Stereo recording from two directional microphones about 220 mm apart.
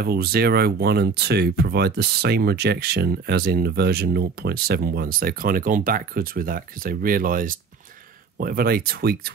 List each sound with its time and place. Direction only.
0.0 s speech: 45° right (ahead or behind)